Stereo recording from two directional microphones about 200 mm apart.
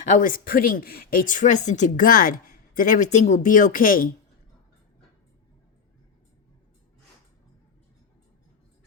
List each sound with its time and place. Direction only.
0.2 s speech: 45° left (ahead or behind)